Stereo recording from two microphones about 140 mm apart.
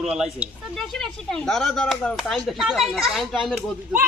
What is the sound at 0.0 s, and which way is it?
A woman's voice, 5° right (ahead or behind).